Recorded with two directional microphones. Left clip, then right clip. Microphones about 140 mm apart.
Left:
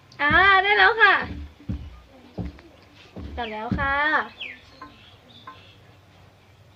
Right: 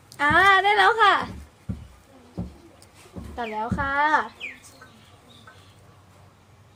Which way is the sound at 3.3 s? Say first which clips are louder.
Right 1 dB; centre (ahead or behind).